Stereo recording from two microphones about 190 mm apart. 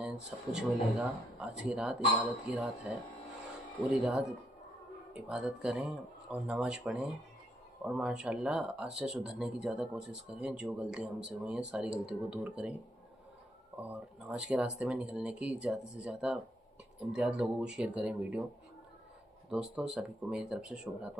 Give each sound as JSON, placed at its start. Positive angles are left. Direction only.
{"t": 0.0, "sound": "speech", "side_deg": -5}
{"t": 13.8, "sound": "speech", "side_deg": -5}
{"t": 19.5, "sound": "speech", "side_deg": -5}